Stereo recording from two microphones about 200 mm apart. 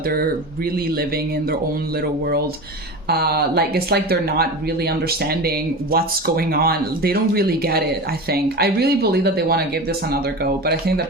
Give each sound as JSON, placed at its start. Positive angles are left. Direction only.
{"t": 0.1, "sound": "speech", "side_deg": -50}
{"t": 3.1, "sound": "speech", "side_deg": -50}